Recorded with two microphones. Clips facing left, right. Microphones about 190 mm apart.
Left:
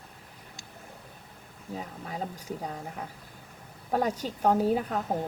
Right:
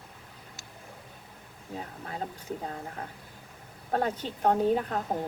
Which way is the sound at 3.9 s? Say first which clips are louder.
Left 1 dB; 10° left (ahead or behind).